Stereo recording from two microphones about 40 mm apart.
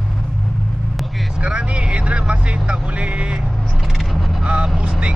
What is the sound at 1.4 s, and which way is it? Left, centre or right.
Vehicle, right.